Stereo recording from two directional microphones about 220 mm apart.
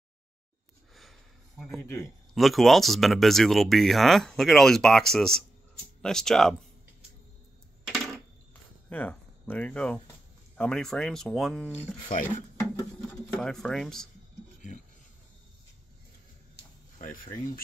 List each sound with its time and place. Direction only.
1.6 s speech: 5° left (ahead or behind)
2.3 s speech: centre (ahead or behind)
7.8 s a sound: centre (ahead or behind)
8.8 s speech: 10° left (ahead or behind)
12.1 s speech: 35° left (ahead or behind)
13.3 s speech: centre (ahead or behind)
17.0 s speech: 40° left (ahead or behind)